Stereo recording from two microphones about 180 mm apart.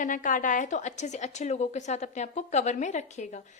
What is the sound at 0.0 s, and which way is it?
A woman's voice, 45° left (ahead or behind).